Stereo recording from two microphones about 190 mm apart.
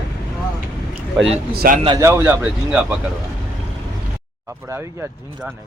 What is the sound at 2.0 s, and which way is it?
Speech, 10° right (ahead or behind).